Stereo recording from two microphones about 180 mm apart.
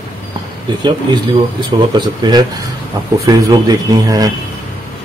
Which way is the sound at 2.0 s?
25° right (ahead or behind).